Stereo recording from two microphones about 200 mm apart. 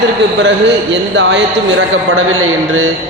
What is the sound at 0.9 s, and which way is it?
Speech, 60° right (ahead or behind).